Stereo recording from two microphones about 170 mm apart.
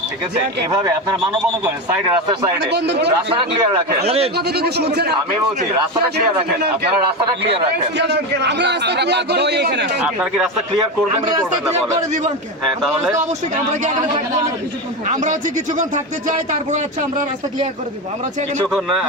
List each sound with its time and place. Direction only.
0.7 s speech: 20° right (ahead or behind)
2.6 s a man's voice: 80° right
3.2 s a man's voice: 30° right (ahead or behind)
4.4 s a man's voice: 70° right (ahead or behind)
7.3 s a man's voice: 35° right (ahead or behind)
7.9 s a man's voice: 90° right
10.0 s speech: 5° right (ahead or behind)
15.0 s speech: 45° right (ahead or behind)